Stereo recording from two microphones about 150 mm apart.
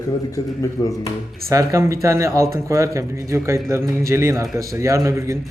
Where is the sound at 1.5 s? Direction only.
20° right (ahead or behind).